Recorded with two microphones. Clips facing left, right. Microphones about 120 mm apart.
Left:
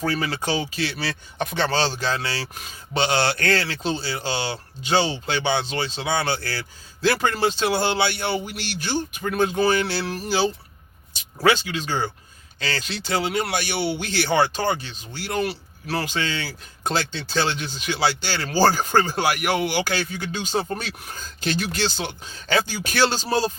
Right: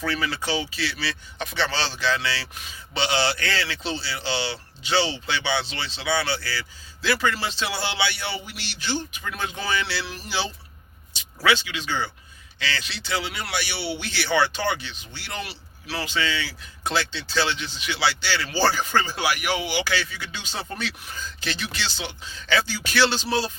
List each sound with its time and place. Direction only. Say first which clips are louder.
0.0 s speech: left 2 dB; 40° left (ahead or behind)